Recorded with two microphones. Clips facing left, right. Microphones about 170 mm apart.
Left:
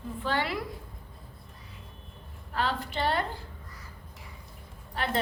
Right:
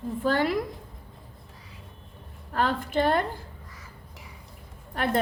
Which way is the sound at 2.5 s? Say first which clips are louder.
Right 5 dB; 50° right (ahead or behind).